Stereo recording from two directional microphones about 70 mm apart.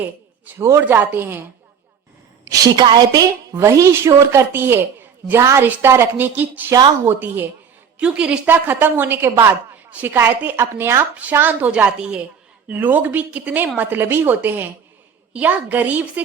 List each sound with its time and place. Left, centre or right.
0.8 s speech: right
2.4 s a woman's voice: right
2.9 s a woman's voice: right
3.7 s a woman's voice: right
5.4 s a woman's voice: right
7.9 s a woman's voice: centre
8.4 s a woman's voice: right
9.7 s a sound: right
10.2 s a woman's voice: right
11.2 s speech: right
11.7 s a woman's voice: centre
12.6 s speech: right